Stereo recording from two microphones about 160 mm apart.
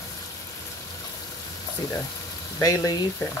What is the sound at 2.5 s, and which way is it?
Speech, 20° left (ahead or behind).